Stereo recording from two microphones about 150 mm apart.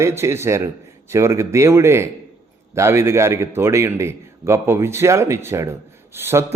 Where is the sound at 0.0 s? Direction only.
15° right (ahead or behind).